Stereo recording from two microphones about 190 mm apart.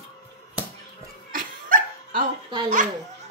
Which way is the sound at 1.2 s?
45° right (ahead or behind).